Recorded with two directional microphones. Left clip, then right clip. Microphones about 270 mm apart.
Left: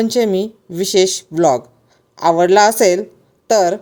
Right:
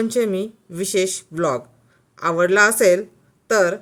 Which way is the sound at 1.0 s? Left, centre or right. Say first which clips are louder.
Left 7 dB; right.